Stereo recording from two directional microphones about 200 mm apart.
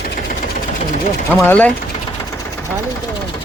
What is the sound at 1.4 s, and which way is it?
Speech, 10° left (ahead or behind).